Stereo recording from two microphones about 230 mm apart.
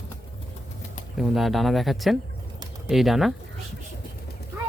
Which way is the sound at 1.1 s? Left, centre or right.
Centre.